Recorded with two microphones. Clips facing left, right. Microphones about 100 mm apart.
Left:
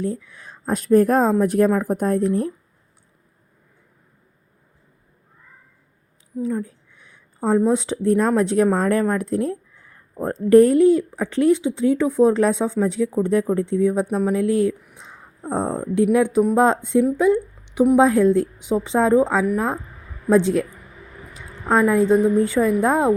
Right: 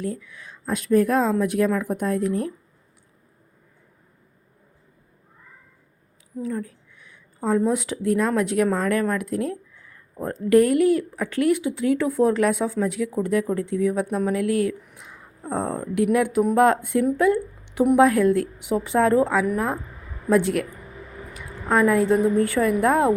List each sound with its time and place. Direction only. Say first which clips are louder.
0.0 s speech: left 4 dB; 30° left (ahead or behind)
6.4 s speech: left 4 dB; 25° left (ahead or behind)
14.9 s a sound: left 1 dB; 25° left (ahead or behind)
16.1 s speech: left 1 dB; 25° left (ahead or behind)
21.3 s a sound: left 2 dB; 25° left (ahead or behind)
22.1 s speech: left 3 dB; 20° left (ahead or behind)